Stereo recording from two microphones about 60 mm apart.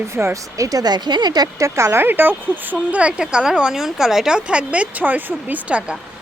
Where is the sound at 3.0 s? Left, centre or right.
Centre.